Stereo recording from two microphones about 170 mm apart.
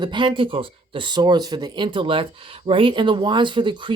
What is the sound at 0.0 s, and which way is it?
Speech, 25° right (ahead or behind).